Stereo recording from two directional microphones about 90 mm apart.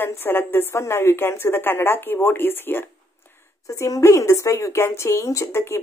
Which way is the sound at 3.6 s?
35° left (ahead or behind).